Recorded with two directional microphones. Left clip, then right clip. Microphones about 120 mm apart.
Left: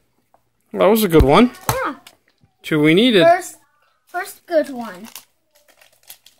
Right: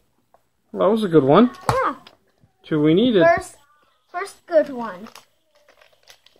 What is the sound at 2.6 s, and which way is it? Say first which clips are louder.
Speech: left 3 dB; 25° left (ahead or behind).